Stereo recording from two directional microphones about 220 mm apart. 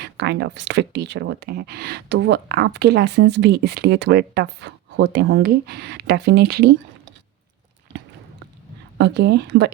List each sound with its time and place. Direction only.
0.0 s speech: 50° right (ahead or behind)
9.0 s speech: 50° right (ahead or behind)